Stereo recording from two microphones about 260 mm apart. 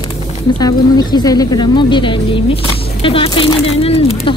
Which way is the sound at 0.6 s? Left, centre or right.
Centre.